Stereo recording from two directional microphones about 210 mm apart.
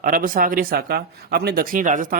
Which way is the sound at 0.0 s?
40° right (ahead or behind).